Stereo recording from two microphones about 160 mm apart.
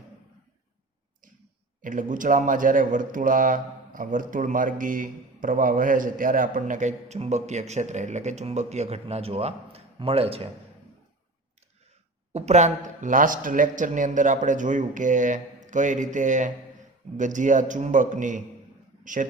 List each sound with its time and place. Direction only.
1.8 s speech: 55° right (ahead or behind); by 10.5 s 40° right (ahead or behind)
12.3 s a man's voice: 45° right (ahead or behind)